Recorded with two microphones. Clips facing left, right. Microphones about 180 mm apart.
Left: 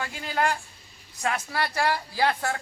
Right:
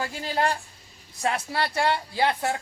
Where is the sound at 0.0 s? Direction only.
30° right (ahead or behind).